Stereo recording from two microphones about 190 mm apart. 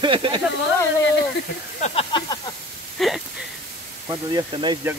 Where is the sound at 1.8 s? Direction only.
25° left (ahead or behind).